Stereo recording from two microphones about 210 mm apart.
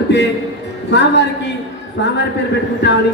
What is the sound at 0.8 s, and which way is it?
Speech, 55° left (ahead or behind).